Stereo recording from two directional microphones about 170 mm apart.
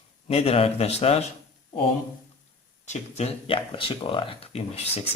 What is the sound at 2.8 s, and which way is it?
Speech, 40° left (ahead or behind).